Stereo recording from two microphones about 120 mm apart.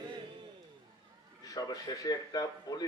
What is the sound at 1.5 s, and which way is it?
A man's voice, 30° left (ahead or behind).